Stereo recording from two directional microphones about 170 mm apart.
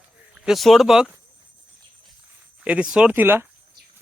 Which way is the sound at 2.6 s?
5° right (ahead or behind).